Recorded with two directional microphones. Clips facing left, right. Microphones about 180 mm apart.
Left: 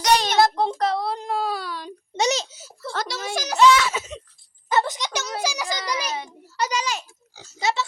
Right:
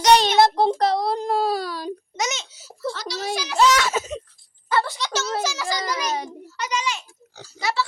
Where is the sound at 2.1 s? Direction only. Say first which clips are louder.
Left 9 dB; 35° left (ahead or behind); by 3.2 s 50° left (ahead or behind).